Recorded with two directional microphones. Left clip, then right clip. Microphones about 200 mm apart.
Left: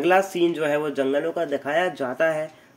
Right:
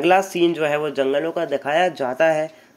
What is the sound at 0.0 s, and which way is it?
Speech, 5° right (ahead or behind).